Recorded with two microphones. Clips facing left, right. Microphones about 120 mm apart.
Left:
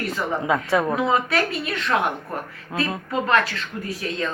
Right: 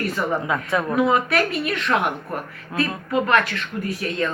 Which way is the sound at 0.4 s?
30° left (ahead or behind).